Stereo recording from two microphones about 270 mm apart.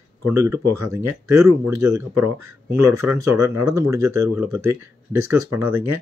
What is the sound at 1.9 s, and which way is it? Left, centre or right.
Speech, centre.